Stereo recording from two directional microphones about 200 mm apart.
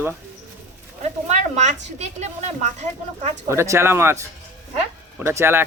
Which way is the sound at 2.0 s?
35° right (ahead or behind).